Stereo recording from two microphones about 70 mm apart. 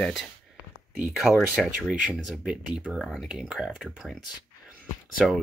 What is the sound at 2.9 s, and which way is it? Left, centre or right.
Speech, centre.